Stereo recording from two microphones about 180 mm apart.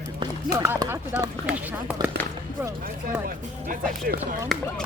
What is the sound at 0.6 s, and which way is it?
Speech, 10° right (ahead or behind).